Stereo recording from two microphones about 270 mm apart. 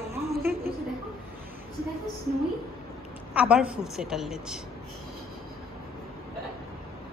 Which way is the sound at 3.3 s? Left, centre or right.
Centre.